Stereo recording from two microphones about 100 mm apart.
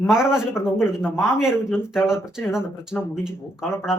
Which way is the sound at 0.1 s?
5° right (ahead or behind).